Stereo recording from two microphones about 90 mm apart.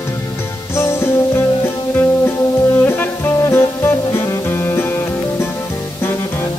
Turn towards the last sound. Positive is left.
turn(degrees=25)  # may be behind; listen again after turning